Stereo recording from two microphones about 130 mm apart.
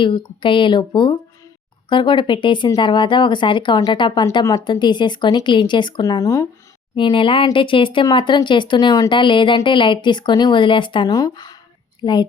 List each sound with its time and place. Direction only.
0.4 s speech: 40° left (ahead or behind)
6.9 s speech: 40° left (ahead or behind)